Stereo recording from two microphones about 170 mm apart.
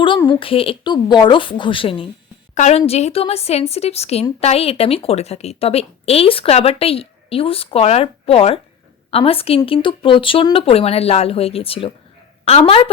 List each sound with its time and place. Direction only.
0.3 s a woman's voice: 30° left (ahead or behind)